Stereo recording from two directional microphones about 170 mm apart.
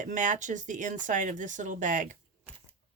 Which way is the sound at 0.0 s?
50° right (ahead or behind).